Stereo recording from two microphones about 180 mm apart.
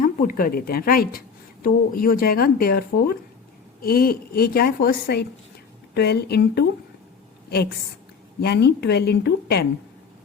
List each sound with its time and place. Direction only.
0.0 s speech: 50° left (ahead or behind); by 6.7 s 65° left (ahead or behind)
8.4 s speech: 65° left (ahead or behind)